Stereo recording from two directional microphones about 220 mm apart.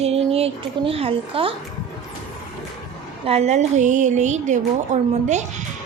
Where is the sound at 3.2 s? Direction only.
30° right (ahead or behind).